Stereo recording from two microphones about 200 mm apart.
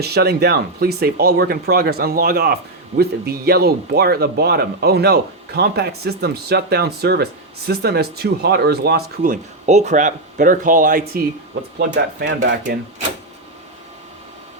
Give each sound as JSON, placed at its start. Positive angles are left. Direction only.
{"t": 0.0, "sound": "speech", "side_deg": -50}
{"t": 11.8, "sound": "speech", "side_deg": -55}
{"t": 12.6, "sound": "speech", "side_deg": -40}